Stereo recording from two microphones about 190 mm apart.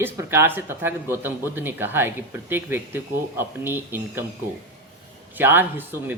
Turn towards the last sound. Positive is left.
turn(degrees=-10)  # may be behind; listen again after turning